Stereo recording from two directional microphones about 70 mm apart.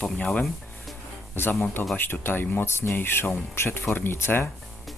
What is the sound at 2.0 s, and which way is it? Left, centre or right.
Speech, left.